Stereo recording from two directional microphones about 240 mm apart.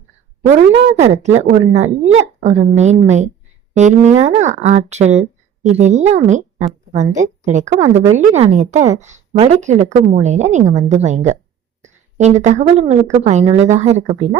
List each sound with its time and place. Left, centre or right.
0.4 s a woman's voice: right